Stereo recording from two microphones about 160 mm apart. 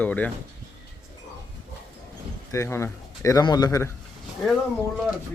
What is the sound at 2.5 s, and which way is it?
A man's voice, 15° left (ahead or behind).